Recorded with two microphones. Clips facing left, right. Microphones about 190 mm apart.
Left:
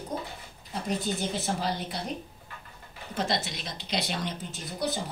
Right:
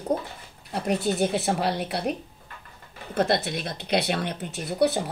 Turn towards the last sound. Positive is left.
turn(degrees=-65)  # may be behind; listen again after turning